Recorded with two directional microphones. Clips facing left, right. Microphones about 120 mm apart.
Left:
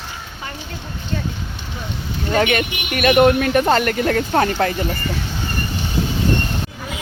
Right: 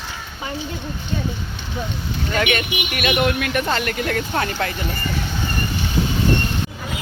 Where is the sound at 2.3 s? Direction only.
40° left (ahead or behind).